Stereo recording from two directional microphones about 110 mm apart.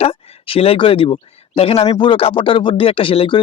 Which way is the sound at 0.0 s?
55° left (ahead or behind).